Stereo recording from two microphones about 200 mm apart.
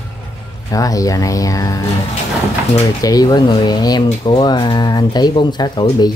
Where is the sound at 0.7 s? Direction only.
15° left (ahead or behind).